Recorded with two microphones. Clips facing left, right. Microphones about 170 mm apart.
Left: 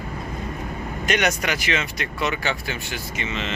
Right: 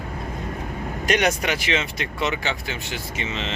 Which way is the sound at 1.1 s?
30° right (ahead or behind).